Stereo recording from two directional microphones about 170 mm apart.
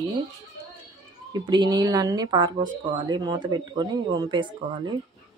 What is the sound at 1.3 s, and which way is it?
A woman's voice, 25° right (ahead or behind).